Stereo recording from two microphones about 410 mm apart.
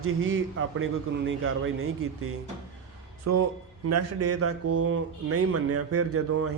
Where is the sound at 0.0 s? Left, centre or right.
Right.